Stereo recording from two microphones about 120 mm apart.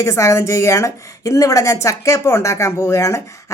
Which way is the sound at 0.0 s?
25° left (ahead or behind).